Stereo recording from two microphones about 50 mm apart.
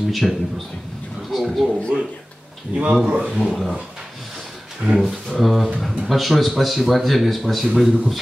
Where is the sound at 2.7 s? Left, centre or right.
Right.